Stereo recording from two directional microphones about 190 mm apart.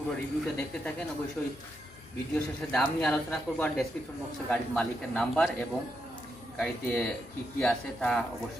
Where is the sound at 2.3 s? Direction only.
5° left (ahead or behind).